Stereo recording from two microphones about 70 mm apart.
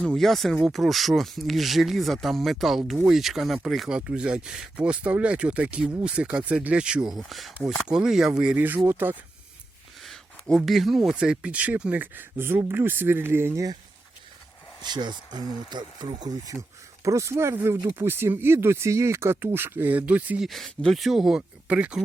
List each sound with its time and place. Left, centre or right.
0.0 s speech: centre
3.8 s speech: centre
7.1 s speech: centre
8.5 s speech: right
10.0 s a sound: centre
10.7 s speech: centre; by 12.2 s right
12.4 s speech: right
14.8 s speech: right
17.0 s speech: right
17.5 s speech: right
19.9 s speech: right
20.4 s speech: centre
21.7 s speech: centre